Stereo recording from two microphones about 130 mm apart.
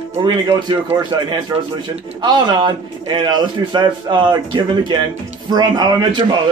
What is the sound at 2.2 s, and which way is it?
A man's voice, 35° right (ahead or behind).